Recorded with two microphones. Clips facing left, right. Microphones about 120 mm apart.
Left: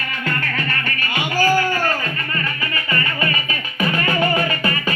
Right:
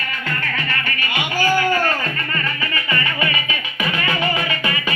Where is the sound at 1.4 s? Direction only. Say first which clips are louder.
Left 2 dB; 40° left (ahead or behind).